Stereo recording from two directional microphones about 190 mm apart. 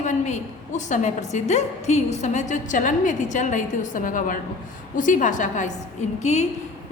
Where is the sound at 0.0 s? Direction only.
40° left (ahead or behind).